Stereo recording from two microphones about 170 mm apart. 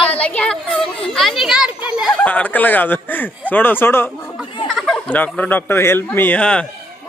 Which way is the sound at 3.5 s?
10° left (ahead or behind).